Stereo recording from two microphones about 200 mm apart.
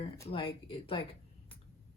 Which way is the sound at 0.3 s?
25° left (ahead or behind).